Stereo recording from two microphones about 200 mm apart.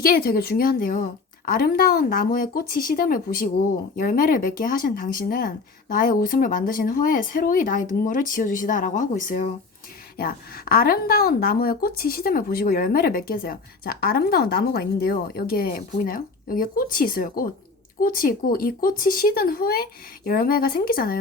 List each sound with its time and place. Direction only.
0.0 s a woman's voice: 45° left (ahead or behind)